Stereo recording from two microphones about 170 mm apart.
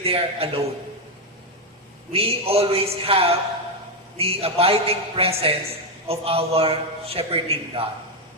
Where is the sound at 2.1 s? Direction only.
35° right (ahead or behind).